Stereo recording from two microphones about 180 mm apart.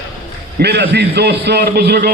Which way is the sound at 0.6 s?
60° right (ahead or behind).